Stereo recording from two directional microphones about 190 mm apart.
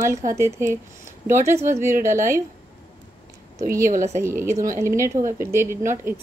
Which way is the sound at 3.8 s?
45° right (ahead or behind).